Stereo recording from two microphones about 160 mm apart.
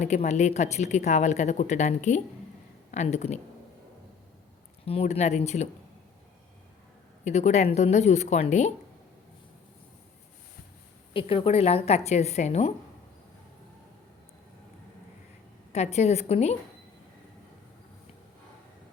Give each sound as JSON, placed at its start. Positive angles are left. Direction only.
{"t": 0.0, "sound": "speech", "side_deg": 45}
{"t": 4.9, "sound": "speech", "side_deg": 40}
{"t": 7.3, "sound": "speech", "side_deg": 45}
{"t": 11.1, "sound": "a woman's voice", "side_deg": 35}
{"t": 15.7, "sound": "speech", "side_deg": 45}